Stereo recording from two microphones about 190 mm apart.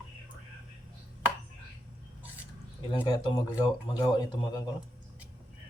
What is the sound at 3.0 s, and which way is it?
Speech, 20° left (ahead or behind).